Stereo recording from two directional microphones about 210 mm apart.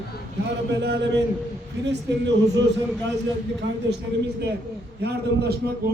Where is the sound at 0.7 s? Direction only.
55° right (ahead or behind).